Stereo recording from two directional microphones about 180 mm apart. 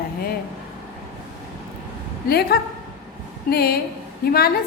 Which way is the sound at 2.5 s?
60° left (ahead or behind).